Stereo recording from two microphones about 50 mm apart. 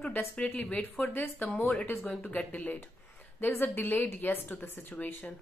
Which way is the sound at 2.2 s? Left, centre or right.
Left.